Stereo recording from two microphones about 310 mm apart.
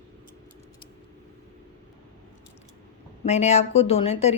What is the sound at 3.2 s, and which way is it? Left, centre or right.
Speech, left.